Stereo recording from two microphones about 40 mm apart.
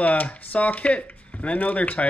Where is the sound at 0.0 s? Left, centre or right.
Left.